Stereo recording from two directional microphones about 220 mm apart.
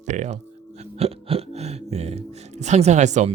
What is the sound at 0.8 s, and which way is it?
Music, 25° right (ahead or behind).